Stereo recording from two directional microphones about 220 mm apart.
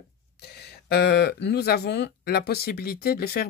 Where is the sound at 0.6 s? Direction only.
45° left (ahead or behind).